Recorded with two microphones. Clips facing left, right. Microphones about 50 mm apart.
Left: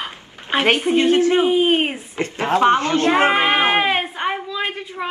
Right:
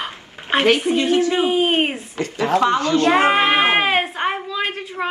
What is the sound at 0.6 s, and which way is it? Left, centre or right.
Speech, left.